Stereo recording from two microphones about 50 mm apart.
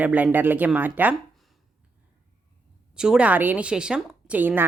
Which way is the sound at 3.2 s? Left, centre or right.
Right.